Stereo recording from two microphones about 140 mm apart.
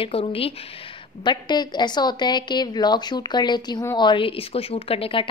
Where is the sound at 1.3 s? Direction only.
30° left (ahead or behind).